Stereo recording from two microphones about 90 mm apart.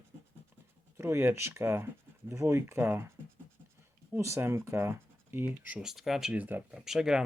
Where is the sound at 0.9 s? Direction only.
30° right (ahead or behind).